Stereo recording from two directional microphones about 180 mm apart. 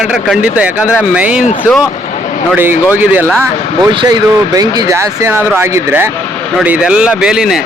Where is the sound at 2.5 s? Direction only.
10° right (ahead or behind).